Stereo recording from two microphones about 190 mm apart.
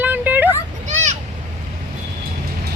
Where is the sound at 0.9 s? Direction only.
40° right (ahead or behind).